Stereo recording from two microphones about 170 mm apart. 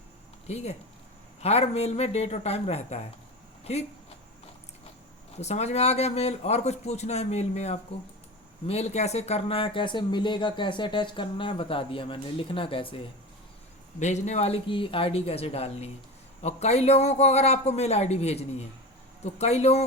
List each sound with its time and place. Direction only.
0.4 s speech: 40° left (ahead or behind)
5.4 s speech: 40° left (ahead or behind)
14.0 s speech: 40° left (ahead or behind)